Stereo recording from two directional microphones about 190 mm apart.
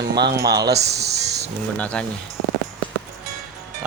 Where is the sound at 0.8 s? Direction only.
60° right (ahead or behind).